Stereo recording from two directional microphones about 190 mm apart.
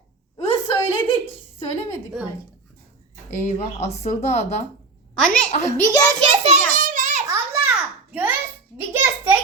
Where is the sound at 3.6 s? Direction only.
35° left (ahead or behind).